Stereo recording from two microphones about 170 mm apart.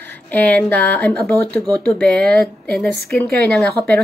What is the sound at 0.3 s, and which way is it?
A woman's voice, 10° left (ahead or behind).